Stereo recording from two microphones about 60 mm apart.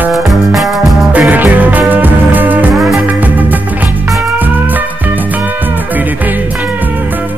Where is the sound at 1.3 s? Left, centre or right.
Right.